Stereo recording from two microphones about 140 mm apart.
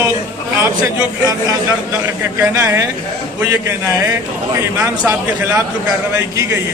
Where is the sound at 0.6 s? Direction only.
25° right (ahead or behind).